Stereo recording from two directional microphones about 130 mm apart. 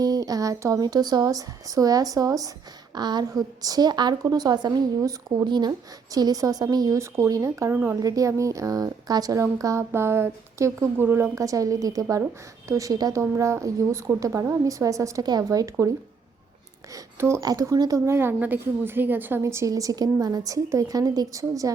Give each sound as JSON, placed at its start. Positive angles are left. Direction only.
{"t": 0.0, "sound": "a woman's voice", "side_deg": -30}
{"t": 16.9, "sound": "a woman's voice", "side_deg": -20}